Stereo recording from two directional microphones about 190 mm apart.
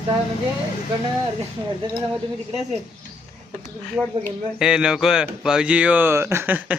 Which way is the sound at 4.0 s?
10° right (ahead or behind).